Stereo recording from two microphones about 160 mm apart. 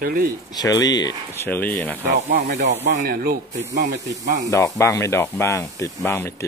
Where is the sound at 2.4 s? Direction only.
90° right.